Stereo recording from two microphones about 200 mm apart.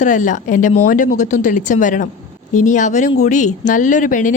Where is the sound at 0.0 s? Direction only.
40° left (ahead or behind).